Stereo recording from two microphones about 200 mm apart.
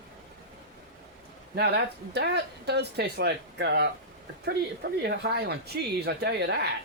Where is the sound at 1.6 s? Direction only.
55° right (ahead or behind).